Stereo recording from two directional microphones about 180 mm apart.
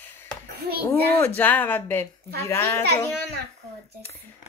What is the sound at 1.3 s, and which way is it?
Speech, 10° left (ahead or behind).